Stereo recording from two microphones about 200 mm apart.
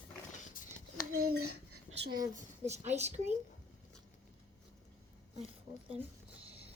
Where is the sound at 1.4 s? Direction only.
90° right.